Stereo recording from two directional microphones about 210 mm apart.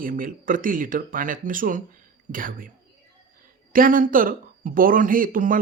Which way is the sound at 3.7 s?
40° right (ahead or behind).